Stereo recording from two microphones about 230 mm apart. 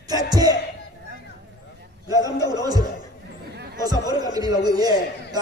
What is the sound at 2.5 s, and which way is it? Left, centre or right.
Speech, centre.